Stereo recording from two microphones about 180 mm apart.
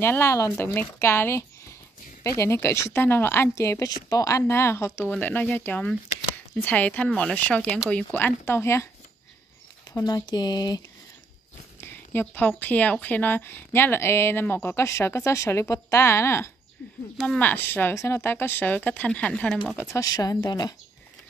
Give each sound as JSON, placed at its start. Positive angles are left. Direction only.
{"t": 0.0, "sound": "speech", "side_deg": 15}
{"t": 9.9, "sound": "speech", "side_deg": 20}
{"t": 11.8, "sound": "speech", "side_deg": 10}
{"t": 19.8, "sound": "speech", "side_deg": 15}